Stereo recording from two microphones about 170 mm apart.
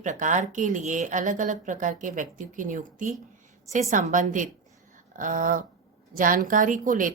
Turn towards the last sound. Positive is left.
turn(degrees=-50)  # may be behind; listen again after turning